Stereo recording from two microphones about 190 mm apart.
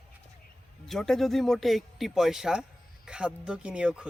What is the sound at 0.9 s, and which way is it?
Speech, centre (ahead or behind).